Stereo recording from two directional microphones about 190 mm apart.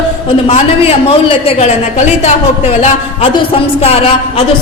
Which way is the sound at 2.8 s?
30° left (ahead or behind).